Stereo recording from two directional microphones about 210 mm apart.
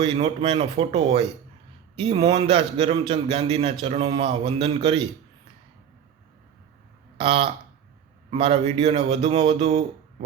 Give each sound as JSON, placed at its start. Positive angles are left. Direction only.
{"t": 0.0, "sound": "a man's voice", "side_deg": -25}
{"t": 7.2, "sound": "a man's voice", "side_deg": -25}